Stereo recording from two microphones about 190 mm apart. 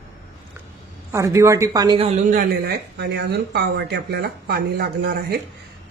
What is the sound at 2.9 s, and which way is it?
Speech, 60° right (ahead or behind).